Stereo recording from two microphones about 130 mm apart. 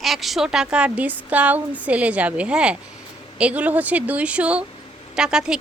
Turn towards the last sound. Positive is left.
turn(degrees=-5)  # may be behind; listen again after turning